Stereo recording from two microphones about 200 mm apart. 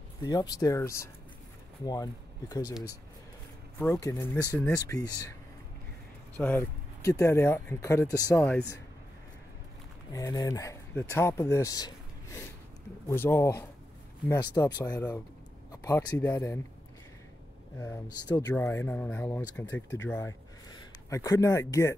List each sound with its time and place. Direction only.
0.2 s speech: 20° left (ahead or behind)
3.7 s speech: 15° left (ahead or behind)
6.3 s speech: 10° left (ahead or behind)
10.1 s speech: 15° left (ahead or behind)
17.7 s speech: 15° left (ahead or behind)